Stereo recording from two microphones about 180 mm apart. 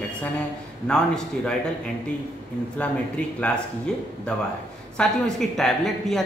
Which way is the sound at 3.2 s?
5° left (ahead or behind).